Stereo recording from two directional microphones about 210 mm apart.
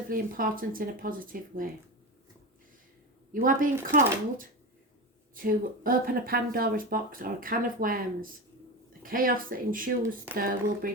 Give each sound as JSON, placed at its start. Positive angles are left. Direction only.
{"t": 0.1, "sound": "speech", "side_deg": -40}
{"t": 3.3, "sound": "speech", "side_deg": -40}